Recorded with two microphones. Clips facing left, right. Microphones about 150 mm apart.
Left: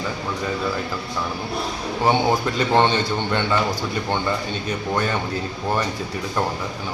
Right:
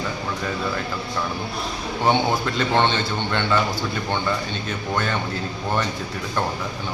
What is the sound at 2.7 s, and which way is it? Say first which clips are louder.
Speech: left 3 dB; 15° left (ahead or behind).